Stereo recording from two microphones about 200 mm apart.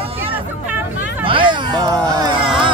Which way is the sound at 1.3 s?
25° right (ahead or behind).